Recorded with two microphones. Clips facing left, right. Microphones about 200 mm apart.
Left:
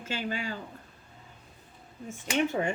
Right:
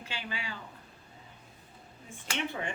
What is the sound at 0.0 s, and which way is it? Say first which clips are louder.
Speech: left 7 dB; 45° left (ahead or behind).